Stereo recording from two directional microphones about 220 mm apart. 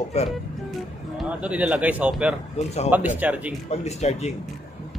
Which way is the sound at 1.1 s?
5° right (ahead or behind).